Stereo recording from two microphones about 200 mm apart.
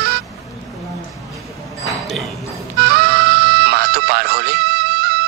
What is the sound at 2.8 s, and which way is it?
Music, 55° right (ahead or behind).